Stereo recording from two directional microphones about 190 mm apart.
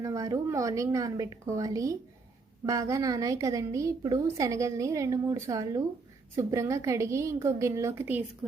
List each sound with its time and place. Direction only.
0.0 s a woman's voice: 15° right (ahead or behind)